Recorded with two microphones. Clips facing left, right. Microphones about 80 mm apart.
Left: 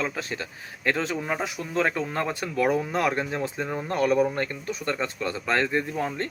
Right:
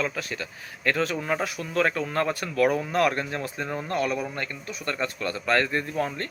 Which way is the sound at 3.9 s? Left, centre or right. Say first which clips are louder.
Left 6 dB; left.